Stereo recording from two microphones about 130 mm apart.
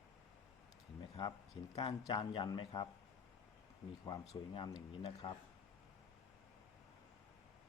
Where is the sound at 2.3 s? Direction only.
40° left (ahead or behind).